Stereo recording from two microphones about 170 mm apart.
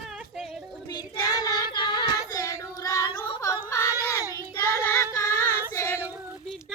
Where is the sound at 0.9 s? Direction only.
25° left (ahead or behind).